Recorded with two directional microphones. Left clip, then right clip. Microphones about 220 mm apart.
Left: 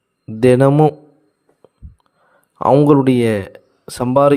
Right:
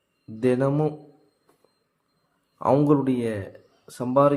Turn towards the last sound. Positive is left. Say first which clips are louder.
# left 7 dB
turn(degrees=45)  # may be behind; listen again after turning